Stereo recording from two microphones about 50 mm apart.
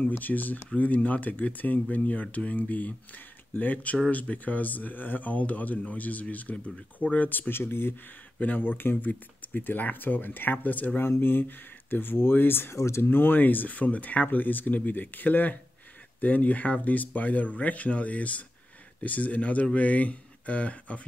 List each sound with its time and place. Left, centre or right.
0.2 s speech: left
8.4 s speech: left
11.0 s speech: left
12.7 s speech: left
13.0 s speech: left